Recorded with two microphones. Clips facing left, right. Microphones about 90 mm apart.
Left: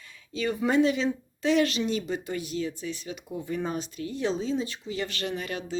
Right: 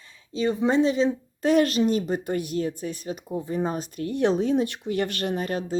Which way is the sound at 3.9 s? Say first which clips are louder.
Right 9 dB; 60° right (ahead or behind).